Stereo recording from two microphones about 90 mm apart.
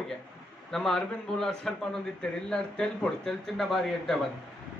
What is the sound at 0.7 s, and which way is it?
Speech, 5° left (ahead or behind).